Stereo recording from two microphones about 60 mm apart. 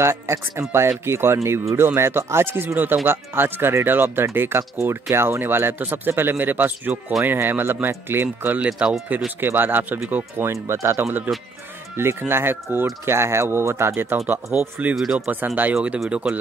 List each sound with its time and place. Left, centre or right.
0.0 s speech: right
8.6 s speech: centre
9.4 s speech: right
10.4 s speech: right
14.8 s speech: right
16.1 s speech: centre